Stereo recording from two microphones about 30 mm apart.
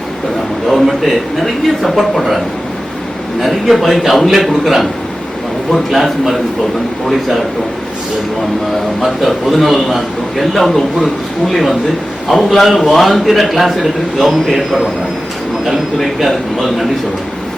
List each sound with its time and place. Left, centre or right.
0.7 s a man's voice: centre
3.4 s a man's voice: centre
9.0 s a man's voice: centre
16.2 s a man's voice: centre